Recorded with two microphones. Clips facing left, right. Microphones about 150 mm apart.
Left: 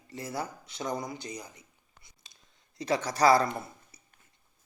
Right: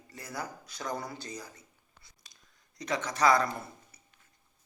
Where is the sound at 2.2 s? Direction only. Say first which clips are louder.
Left 1 dB; 25° left (ahead or behind).